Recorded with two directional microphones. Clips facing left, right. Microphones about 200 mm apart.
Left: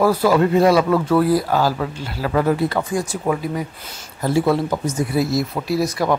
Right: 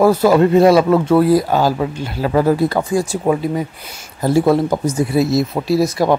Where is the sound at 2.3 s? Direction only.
35° right (ahead or behind).